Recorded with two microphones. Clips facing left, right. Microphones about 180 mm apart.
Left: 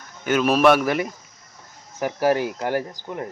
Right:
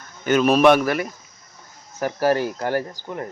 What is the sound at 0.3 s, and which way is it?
Speech, 5° left (ahead or behind).